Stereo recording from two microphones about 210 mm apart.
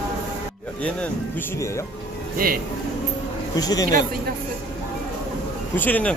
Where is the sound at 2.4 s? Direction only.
45° right (ahead or behind).